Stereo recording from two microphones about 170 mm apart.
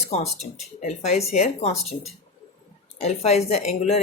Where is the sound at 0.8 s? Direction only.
40° left (ahead or behind).